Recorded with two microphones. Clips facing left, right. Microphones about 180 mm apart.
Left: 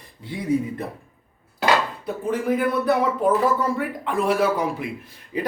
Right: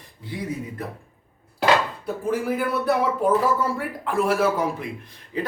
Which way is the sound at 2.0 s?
5° right (ahead or behind).